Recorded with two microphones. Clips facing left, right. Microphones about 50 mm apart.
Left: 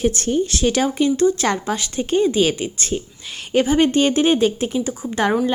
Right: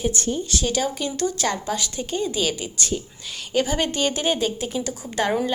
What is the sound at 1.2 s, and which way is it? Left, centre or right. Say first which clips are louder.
Speech: left 7 dB; left.